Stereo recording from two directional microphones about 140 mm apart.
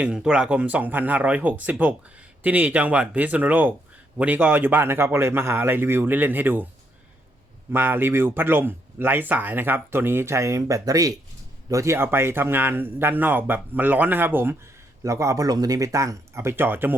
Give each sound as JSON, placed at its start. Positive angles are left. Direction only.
{"t": 0.0, "sound": "a man's voice", "side_deg": -5}
{"t": 7.7, "sound": "a man's voice", "side_deg": -15}